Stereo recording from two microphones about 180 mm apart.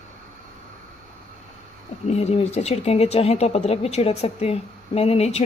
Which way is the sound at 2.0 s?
35° left (ahead or behind).